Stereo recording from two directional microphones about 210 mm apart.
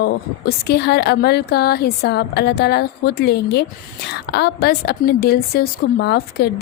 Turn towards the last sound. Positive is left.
turn(degrees=50)  # may be behind; listen again after turning